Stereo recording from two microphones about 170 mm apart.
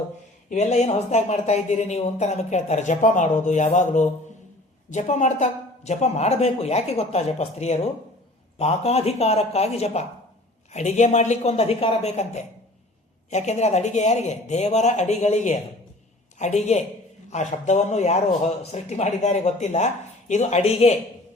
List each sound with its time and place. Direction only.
0.5 s speech: 40° left (ahead or behind)